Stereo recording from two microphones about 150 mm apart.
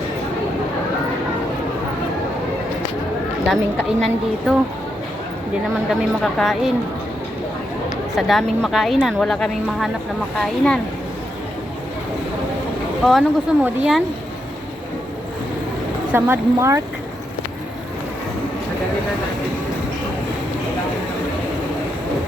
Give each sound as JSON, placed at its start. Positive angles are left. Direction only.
{"t": 3.8, "sound": "speech", "side_deg": -5}
{"t": 5.9, "sound": "speech", "side_deg": 0}
{"t": 8.1, "sound": "speech", "side_deg": 0}
{"t": 13.1, "sound": "speech", "side_deg": -5}
{"t": 16.1, "sound": "speech", "side_deg": -15}